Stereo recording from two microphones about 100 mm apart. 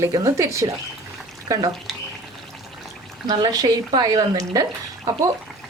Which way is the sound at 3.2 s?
40° right (ahead or behind).